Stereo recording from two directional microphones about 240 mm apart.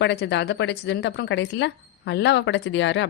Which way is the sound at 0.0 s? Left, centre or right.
Left.